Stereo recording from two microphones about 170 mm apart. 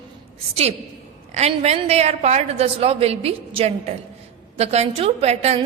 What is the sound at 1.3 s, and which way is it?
A woman's voice, 40° right (ahead or behind).